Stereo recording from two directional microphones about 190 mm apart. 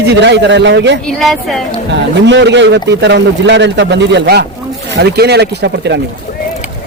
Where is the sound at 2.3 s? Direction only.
70° right (ahead or behind).